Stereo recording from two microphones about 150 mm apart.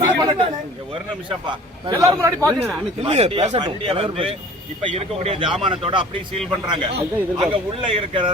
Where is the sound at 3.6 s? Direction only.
35° right (ahead or behind).